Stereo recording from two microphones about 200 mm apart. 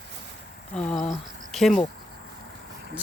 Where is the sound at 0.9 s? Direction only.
35° left (ahead or behind).